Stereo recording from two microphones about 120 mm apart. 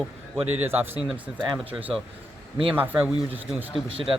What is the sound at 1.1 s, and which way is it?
Speech, 5° right (ahead or behind).